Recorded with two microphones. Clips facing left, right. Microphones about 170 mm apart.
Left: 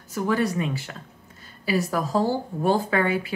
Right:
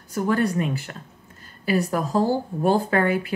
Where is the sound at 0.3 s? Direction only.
50° right (ahead or behind).